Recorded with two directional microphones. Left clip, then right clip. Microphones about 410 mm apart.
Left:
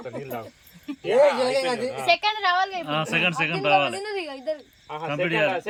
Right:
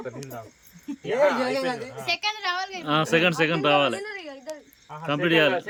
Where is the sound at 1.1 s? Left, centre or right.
Left.